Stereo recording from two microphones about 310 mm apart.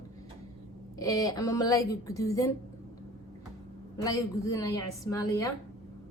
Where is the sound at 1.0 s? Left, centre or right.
Centre.